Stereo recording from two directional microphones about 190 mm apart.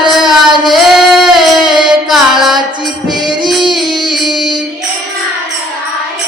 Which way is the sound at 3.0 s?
20° right (ahead or behind).